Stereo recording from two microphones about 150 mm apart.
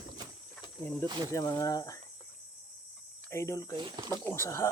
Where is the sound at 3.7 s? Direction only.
30° right (ahead or behind).